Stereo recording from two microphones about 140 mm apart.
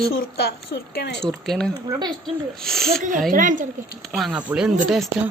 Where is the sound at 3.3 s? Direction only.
70° right (ahead or behind).